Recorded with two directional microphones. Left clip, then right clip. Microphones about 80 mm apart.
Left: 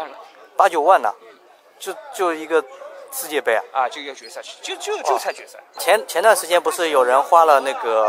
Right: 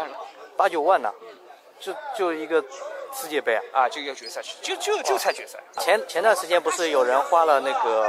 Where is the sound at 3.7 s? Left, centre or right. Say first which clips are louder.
Left 1 dB; centre.